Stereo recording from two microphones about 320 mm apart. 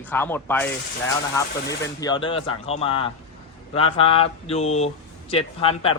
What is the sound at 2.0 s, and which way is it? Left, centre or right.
Speech, centre.